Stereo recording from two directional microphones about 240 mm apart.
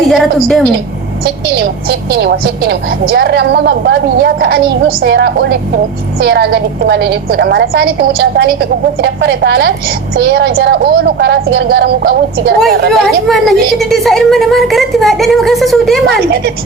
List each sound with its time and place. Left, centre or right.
0.1 s a woman's voice: centre
1.2 s a woman's voice: right
12.9 s a woman's voice: centre
16.0 s speech: right